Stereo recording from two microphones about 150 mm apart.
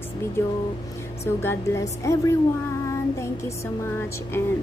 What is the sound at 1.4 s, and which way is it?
Speech, 15° left (ahead or behind).